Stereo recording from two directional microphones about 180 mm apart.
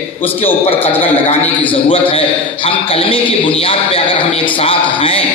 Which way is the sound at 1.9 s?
30° left (ahead or behind).